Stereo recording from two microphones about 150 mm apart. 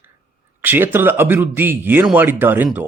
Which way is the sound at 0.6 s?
15° right (ahead or behind).